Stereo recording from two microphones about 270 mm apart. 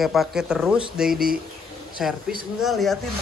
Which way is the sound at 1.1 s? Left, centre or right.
Right.